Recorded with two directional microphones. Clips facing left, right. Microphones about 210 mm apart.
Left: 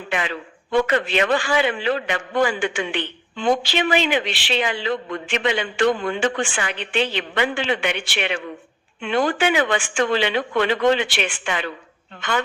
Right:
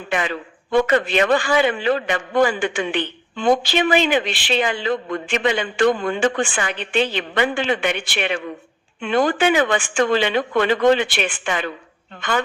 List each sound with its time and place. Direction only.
0.1 s a man's voice: 45° right (ahead or behind)